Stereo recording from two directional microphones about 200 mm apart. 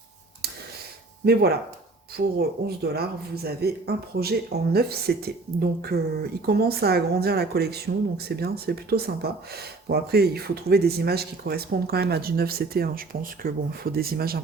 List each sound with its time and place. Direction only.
1.2 s speech: 50° right (ahead or behind)